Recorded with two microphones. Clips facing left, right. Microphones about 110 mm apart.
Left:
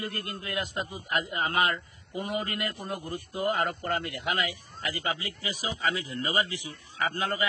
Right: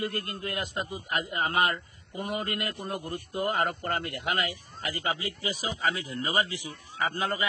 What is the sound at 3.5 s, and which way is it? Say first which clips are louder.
A man's voice: even; 50° right (ahead or behind).